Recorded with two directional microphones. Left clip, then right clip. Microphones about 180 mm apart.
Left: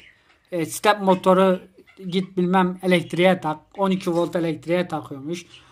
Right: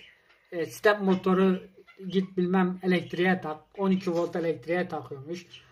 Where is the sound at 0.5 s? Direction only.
50° left (ahead or behind).